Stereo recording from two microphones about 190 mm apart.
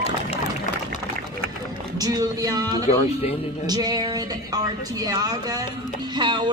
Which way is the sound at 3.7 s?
20° right (ahead or behind).